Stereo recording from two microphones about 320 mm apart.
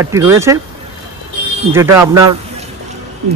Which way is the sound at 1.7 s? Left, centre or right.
Centre.